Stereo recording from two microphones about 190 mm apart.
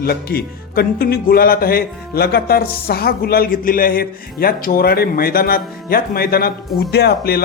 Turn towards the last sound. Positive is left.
turn(degrees=55)  # may be behind; listen again after turning